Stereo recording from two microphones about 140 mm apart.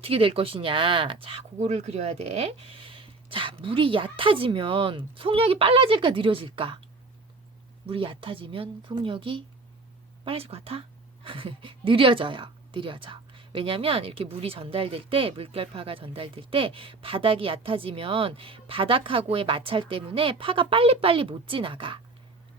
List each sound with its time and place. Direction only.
0.0 s a woman's voice: 40° right (ahead or behind)
1.5 s a woman's voice: 50° right (ahead or behind)
7.9 s a woman's voice: 40° right (ahead or behind)